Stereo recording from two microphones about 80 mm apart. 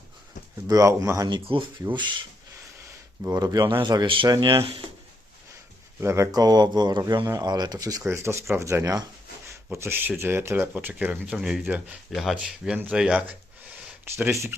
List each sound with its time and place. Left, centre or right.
0.7 s speech: right
1.5 s speech: right
1.9 s speech: right
3.3 s speech: right
3.7 s speech: right
6.0 s speech: right
6.3 s speech: right
7.3 s speech: right
8.1 s speech: right
9.7 s speech: right
11.3 s speech: centre
12.1 s speech: centre
14.0 s speech: right